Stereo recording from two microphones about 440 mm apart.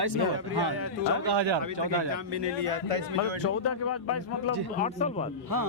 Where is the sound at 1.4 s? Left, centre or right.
Right.